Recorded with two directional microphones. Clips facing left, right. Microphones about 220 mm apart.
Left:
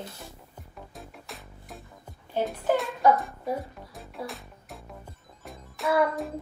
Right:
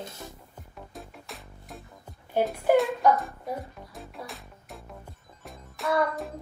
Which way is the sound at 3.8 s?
Centre (ahead or behind).